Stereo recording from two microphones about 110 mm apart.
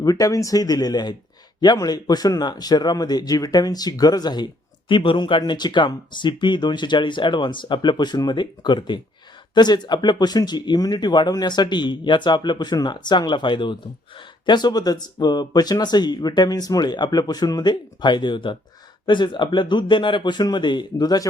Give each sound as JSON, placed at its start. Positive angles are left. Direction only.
{"t": 0.0, "sound": "speech", "side_deg": 35}